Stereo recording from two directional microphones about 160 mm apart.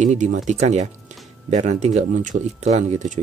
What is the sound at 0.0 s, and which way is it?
Speech, 50° right (ahead or behind).